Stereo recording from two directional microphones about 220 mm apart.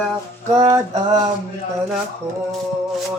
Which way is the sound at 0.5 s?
15° right (ahead or behind).